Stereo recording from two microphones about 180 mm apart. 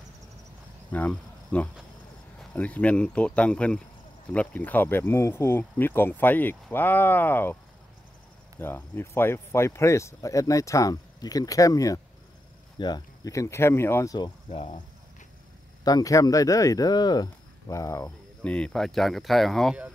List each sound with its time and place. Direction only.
0.9 s speech: 10° left (ahead or behind)
8.5 s speech: 10° left (ahead or behind)
15.8 s speech: 20° left (ahead or behind)
18.0 s speech: 5° left (ahead or behind)